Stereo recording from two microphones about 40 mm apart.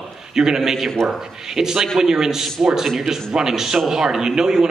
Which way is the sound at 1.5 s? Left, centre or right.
Centre.